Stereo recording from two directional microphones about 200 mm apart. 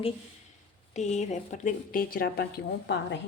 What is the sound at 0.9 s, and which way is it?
A woman's voice, 35° left (ahead or behind).